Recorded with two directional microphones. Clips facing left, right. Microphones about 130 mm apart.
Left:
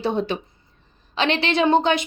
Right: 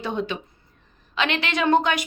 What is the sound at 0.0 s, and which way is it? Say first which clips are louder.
A woman's voice: left 4 dB; 35° left (ahead or behind).